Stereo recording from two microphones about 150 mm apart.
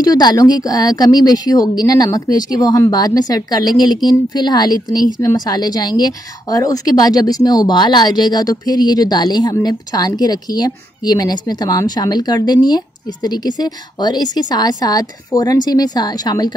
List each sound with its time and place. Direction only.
0.0 s a woman's voice: 25° left (ahead or behind)